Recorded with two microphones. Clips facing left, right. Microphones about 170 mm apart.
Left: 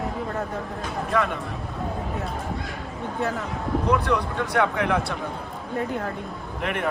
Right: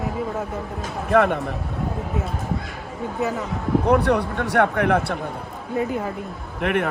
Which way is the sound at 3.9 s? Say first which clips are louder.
Right 4 dB; 65° right (ahead or behind).